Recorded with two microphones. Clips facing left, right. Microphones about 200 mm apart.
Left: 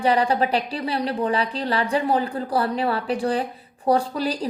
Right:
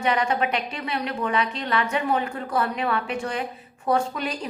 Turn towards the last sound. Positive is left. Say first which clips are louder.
# left 3 dB
turn(degrees=35)  # may be behind; listen again after turning